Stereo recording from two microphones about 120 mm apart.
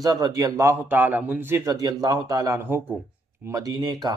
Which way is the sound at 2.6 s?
15° right (ahead or behind).